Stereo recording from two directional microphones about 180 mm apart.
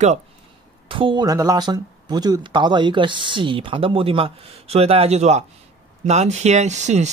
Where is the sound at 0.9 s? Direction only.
30° right (ahead or behind).